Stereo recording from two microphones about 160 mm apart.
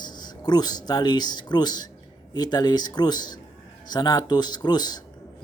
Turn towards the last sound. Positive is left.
turn(degrees=25)  # may be behind; listen again after turning